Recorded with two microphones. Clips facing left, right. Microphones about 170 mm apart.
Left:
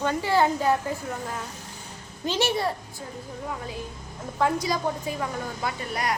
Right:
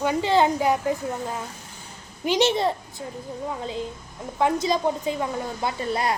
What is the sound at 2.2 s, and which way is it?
Speech, 20° right (ahead or behind).